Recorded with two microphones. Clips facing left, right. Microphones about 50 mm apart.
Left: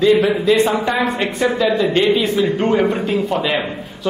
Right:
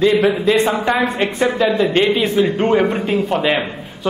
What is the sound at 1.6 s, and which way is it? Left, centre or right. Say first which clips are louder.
A man's voice: right 1 dB; centre.